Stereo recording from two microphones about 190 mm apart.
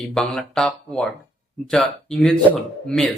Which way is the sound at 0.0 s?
Centre (ahead or behind).